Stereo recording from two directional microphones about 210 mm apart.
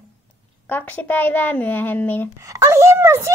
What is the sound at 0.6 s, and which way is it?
A woman's voice, 10° left (ahead or behind).